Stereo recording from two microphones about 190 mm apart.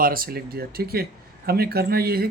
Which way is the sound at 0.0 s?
50° right (ahead or behind).